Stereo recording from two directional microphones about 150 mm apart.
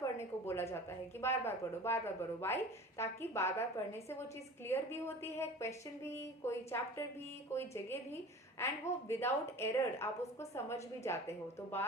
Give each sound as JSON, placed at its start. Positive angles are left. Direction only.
{"t": 0.0, "sound": "a woman's voice", "side_deg": 15}
{"t": 4.7, "sound": "a woman's voice", "side_deg": 15}